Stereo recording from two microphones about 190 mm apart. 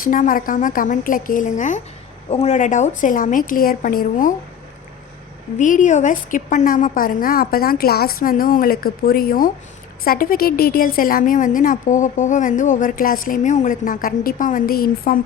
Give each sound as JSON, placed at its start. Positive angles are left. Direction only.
{"t": 0.0, "sound": "a woman's voice", "side_deg": 45}
{"t": 5.5, "sound": "a woman's voice", "side_deg": 40}